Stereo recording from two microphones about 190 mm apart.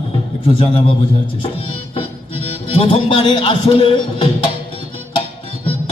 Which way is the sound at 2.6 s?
30° left (ahead or behind).